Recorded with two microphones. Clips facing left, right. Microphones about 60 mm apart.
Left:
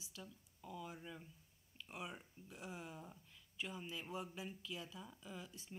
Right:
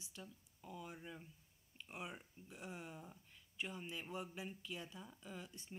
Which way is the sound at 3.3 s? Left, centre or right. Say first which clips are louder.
Right 1 dB; centre.